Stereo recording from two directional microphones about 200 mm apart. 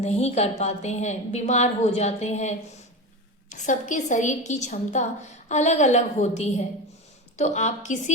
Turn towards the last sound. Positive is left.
turn(degrees=35)  # may be behind; listen again after turning